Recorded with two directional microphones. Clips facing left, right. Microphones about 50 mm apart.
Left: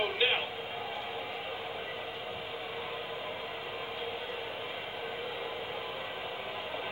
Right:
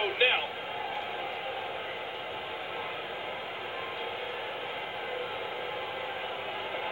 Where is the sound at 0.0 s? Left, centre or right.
Right.